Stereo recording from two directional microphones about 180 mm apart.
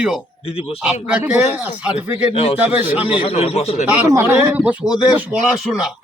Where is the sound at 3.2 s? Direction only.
30° left (ahead or behind).